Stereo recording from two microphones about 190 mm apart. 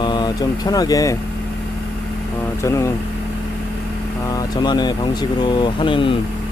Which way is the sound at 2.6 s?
15° left (ahead or behind).